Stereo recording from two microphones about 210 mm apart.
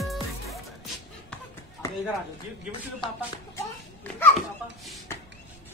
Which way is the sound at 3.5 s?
10° left (ahead or behind).